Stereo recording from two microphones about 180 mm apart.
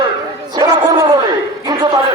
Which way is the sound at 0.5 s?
20° right (ahead or behind).